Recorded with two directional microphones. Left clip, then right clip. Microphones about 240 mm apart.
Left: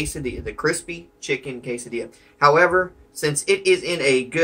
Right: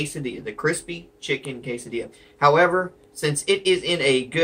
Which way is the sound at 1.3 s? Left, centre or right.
Centre.